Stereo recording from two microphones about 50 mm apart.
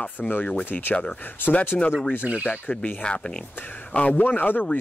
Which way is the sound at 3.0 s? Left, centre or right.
Centre.